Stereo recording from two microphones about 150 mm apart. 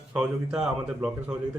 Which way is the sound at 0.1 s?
5° right (ahead or behind).